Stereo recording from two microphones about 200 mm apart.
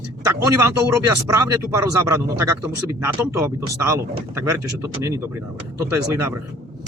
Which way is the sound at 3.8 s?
15° right (ahead or behind).